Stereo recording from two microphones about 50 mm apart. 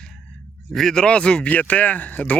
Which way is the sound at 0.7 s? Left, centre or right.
Centre.